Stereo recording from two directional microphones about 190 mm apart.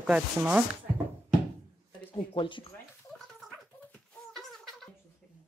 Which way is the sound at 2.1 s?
25° left (ahead or behind).